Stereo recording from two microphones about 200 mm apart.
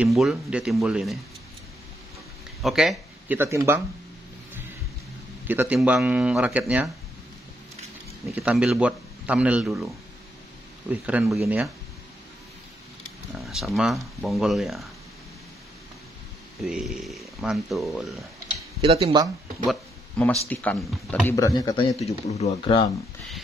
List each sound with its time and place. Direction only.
0.0 s speech: centre (ahead or behind)
2.6 s speech: centre (ahead or behind)
5.5 s speech: 10° right (ahead or behind)
8.4 s speech: 5° right (ahead or behind)
13.4 s speech: centre (ahead or behind)
16.6 s speech: 5° right (ahead or behind)
18.8 s speech: 25° right (ahead or behind)
19.6 s speech: 5° left (ahead or behind); by 21.9 s 20° left (ahead or behind)
22.0 s speech: 35° left (ahead or behind)